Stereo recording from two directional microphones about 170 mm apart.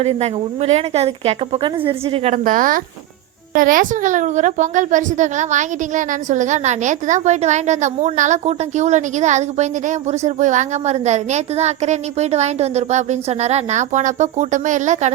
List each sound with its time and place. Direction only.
0.0 s a child's voice: 35° right (ahead or behind)